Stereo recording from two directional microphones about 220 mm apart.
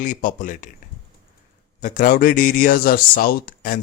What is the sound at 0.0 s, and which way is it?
Speech, 35° left (ahead or behind).